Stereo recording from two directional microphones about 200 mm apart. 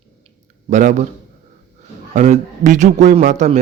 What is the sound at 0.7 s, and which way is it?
Speech, 35° right (ahead or behind).